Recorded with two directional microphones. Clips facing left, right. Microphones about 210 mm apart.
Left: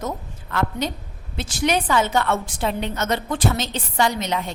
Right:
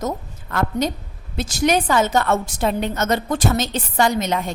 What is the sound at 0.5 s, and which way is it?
A woman's voice, 45° right (ahead or behind).